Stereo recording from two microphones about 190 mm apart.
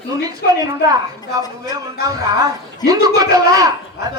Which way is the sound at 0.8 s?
20° right (ahead or behind).